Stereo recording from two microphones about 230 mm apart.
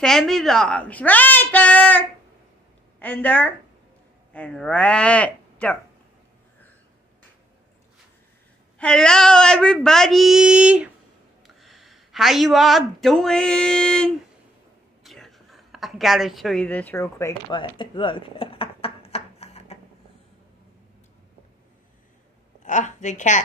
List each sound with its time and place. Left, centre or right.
0.0 s a woman's voice: centre
8.7 s a woman's voice: centre
15.0 s a sound: centre; by 19.8 s left
22.6 s a woman's voice: left